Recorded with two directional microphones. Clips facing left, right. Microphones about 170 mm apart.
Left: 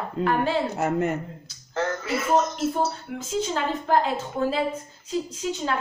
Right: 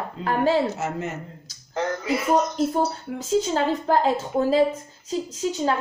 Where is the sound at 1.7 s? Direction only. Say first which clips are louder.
Right 2 dB; 15° right (ahead or behind).